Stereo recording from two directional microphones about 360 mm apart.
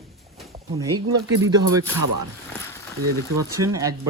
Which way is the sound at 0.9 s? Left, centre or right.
Right.